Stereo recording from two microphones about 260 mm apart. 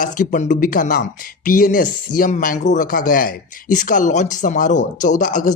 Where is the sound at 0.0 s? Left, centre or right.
Left.